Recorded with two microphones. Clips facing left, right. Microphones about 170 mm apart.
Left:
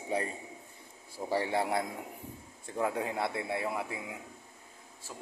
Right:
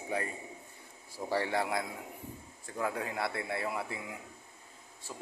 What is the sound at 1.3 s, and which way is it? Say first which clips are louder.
Speech: left 1 dB; 25° left (ahead or behind).